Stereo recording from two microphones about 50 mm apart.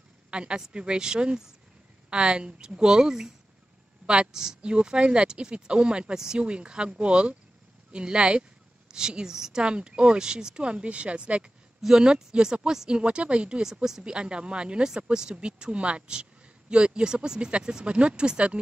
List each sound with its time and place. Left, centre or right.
0.3 s a woman's voice: centre